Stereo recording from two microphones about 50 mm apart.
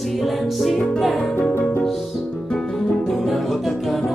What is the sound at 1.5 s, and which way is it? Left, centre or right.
Music, left.